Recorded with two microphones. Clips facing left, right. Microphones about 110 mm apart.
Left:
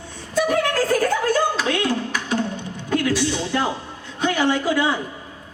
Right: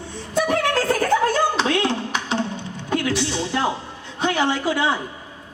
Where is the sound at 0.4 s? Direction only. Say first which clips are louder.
Even; 25° right (ahead or behind).